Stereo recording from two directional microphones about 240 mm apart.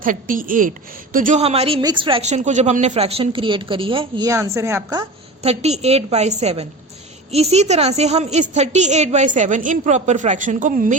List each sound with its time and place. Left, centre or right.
0.0 s a woman's voice: right